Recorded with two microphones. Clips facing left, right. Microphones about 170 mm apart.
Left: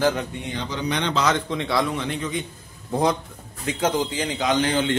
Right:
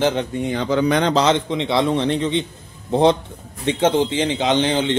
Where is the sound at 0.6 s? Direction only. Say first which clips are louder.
Right 9 dB; 55° right (ahead or behind).